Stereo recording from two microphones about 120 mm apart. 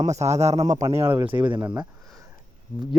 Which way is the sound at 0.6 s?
30° right (ahead or behind).